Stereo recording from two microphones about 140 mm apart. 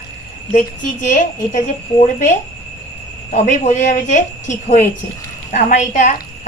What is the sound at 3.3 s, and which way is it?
A woman's voice, 55° left (ahead or behind).